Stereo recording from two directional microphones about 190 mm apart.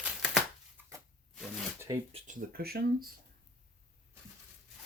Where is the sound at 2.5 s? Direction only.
50° right (ahead or behind).